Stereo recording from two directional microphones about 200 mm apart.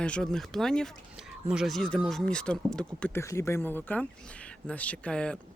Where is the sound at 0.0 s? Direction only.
5° left (ahead or behind).